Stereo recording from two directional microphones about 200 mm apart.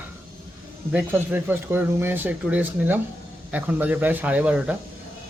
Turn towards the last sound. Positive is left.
turn(degrees=-5)  # may be behind; listen again after turning